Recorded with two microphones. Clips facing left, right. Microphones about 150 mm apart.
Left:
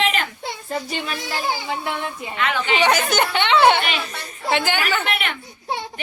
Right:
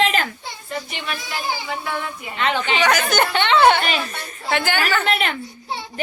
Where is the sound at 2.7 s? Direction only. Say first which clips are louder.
Left 2 dB; 25° left (ahead or behind).